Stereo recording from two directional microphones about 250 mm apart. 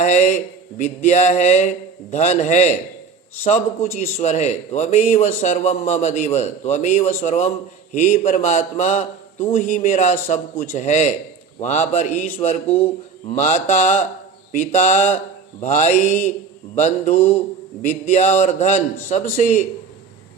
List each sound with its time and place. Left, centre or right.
0.0 s a man's voice: left
3.9 s a man's voice: left